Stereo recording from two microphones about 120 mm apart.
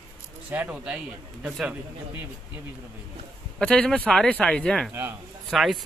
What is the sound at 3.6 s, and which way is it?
Speech, 5° left (ahead or behind).